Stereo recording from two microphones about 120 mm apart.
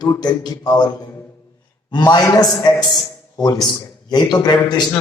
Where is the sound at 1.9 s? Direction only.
35° left (ahead or behind).